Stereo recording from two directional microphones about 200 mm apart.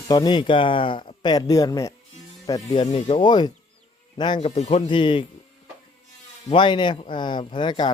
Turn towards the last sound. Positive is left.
turn(degrees=20)  # may be behind; listen again after turning